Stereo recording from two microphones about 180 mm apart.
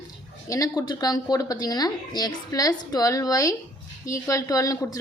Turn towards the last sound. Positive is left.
turn(degrees=20)  # may be behind; listen again after turning